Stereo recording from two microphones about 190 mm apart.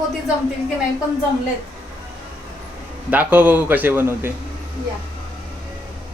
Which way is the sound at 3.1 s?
10° right (ahead or behind).